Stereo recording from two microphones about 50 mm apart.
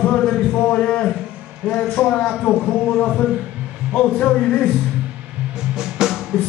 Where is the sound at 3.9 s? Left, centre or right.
Left.